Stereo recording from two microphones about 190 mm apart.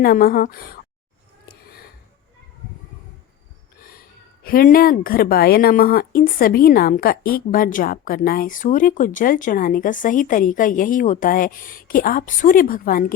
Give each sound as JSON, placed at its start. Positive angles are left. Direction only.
{"t": 0.0, "sound": "a woman's voice", "side_deg": 50}
{"t": 3.8, "sound": "a sound", "side_deg": 50}
{"t": 4.4, "sound": "a woman's voice", "side_deg": 50}